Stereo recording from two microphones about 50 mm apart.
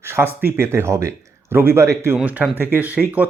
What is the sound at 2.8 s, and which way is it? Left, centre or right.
Speech, right.